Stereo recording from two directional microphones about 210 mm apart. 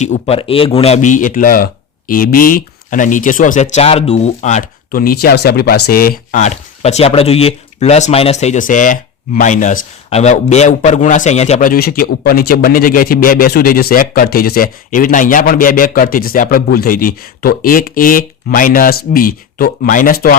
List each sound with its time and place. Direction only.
0.0 s speech: 30° left (ahead or behind)
11.7 s a man's voice: 45° left (ahead or behind)